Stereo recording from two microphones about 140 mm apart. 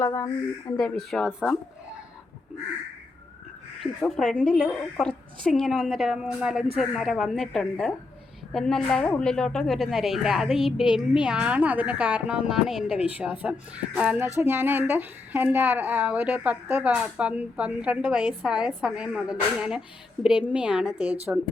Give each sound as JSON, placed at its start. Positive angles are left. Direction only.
{"t": 0.0, "sound": "speech", "side_deg": 25}
{"t": 0.8, "sound": "a woman's voice", "side_deg": 5}
{"t": 3.8, "sound": "a woman's voice", "side_deg": 5}